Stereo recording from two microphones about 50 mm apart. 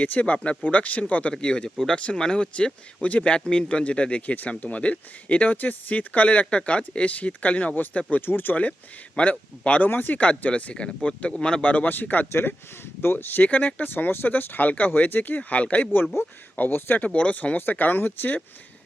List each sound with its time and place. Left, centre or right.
0.0 s speech: left
1.3 s speech: centre; by 8.2 s left
8.2 s speech: left
9.3 s speech: left
9.8 s speech: left
12.3 s speech: left
13.5 s speech: left
13.9 s speech: left
16.6 s speech: left
17.1 s speech: left